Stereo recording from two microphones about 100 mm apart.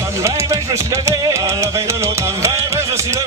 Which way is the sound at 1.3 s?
30° right (ahead or behind).